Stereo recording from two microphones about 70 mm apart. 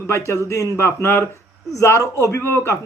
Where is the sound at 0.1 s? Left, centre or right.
Left.